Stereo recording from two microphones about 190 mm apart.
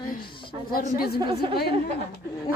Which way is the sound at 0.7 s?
50° left (ahead or behind).